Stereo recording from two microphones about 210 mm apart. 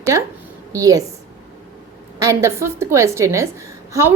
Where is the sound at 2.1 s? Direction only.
15° right (ahead or behind).